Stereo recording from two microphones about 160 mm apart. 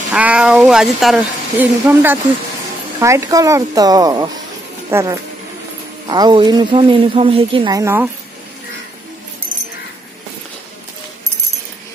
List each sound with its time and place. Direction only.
0.1 s speech: 5° right (ahead or behind)
6.0 s a woman's voice: 25° right (ahead or behind)
7.7 s speech: 15° right (ahead or behind)